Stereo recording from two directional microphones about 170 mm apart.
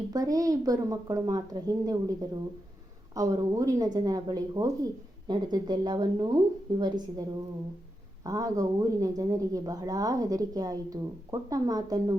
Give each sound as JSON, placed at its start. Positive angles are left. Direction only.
{"t": 0.1, "sound": "speech", "side_deg": -20}
{"t": 3.2, "sound": "speech", "side_deg": -20}